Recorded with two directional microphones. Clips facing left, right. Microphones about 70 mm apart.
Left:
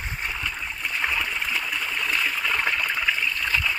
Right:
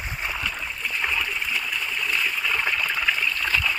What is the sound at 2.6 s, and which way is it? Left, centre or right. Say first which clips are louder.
Stream: even; left.